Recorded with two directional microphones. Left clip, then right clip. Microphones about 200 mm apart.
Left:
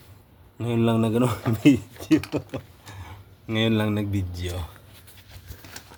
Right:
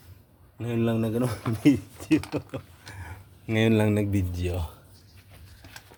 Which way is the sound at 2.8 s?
25° right (ahead or behind).